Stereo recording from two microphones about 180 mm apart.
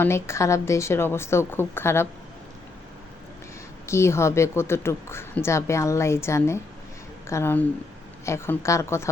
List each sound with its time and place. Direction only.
0.0 s a woman's voice: 15° left (ahead or behind)
3.8 s a woman's voice: 15° left (ahead or behind)